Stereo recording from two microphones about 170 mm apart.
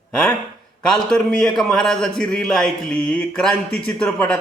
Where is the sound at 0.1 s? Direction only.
5° left (ahead or behind).